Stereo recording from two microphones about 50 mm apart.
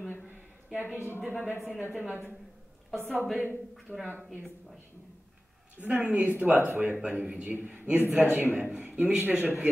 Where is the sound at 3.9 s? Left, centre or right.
Right.